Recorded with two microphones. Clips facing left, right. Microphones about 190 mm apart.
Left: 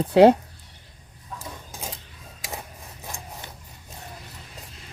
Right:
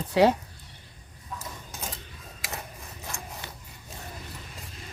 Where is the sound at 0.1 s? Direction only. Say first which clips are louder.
Left 7 dB; 55° left (ahead or behind).